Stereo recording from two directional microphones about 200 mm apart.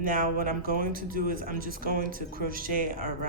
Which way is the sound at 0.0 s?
45° right (ahead or behind).